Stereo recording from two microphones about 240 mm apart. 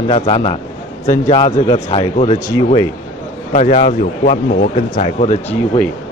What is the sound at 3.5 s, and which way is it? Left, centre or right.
A man's voice, left.